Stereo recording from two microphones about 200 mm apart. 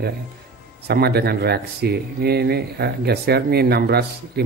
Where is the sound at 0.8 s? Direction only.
55° right (ahead or behind).